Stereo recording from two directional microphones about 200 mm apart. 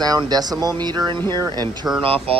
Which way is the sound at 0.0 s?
20° right (ahead or behind).